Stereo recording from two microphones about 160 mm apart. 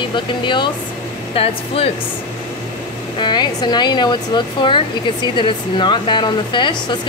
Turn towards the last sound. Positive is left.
turn(degrees=30)  # may be behind; listen again after turning